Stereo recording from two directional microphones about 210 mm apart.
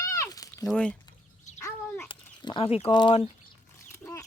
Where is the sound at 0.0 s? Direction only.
15° left (ahead or behind).